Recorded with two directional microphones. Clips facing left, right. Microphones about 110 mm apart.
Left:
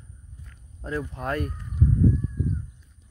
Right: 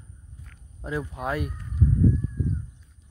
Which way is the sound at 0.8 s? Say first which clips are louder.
Even; 10° right (ahead or behind).